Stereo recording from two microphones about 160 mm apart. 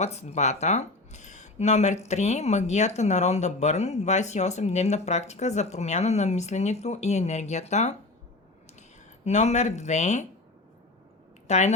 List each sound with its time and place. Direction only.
0.0 s speech: 45° left (ahead or behind)
9.2 s speech: 45° left (ahead or behind)
11.4 s a woman's voice: 45° left (ahead or behind)